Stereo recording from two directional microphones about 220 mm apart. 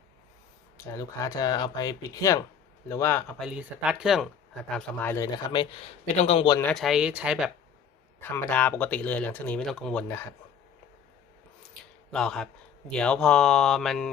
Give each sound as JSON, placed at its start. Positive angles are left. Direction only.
{"t": 0.9, "sound": "speech", "side_deg": 15}
{"t": 3.4, "sound": "a man's voice", "side_deg": -5}
{"t": 6.6, "sound": "speech", "side_deg": 5}
{"t": 8.2, "sound": "speech", "side_deg": 10}
{"t": 12.1, "sound": "speech", "side_deg": 0}